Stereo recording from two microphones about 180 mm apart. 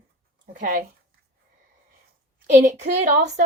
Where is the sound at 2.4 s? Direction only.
45° right (ahead or behind).